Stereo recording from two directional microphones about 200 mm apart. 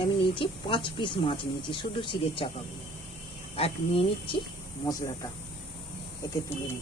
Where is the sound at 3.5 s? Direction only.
30° left (ahead or behind).